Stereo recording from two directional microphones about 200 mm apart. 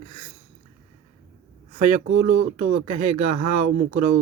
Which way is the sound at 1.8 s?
35° right (ahead or behind).